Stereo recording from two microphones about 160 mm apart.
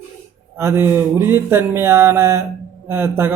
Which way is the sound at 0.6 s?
15° right (ahead or behind).